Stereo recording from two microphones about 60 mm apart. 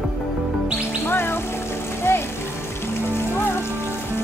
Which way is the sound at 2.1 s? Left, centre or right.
Left.